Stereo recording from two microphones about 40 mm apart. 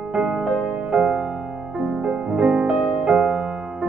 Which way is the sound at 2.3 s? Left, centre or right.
Right.